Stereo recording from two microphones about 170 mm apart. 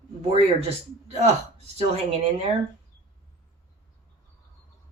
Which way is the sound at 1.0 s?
40° right (ahead or behind).